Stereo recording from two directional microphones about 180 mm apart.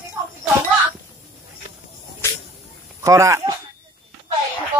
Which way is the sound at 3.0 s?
15° right (ahead or behind).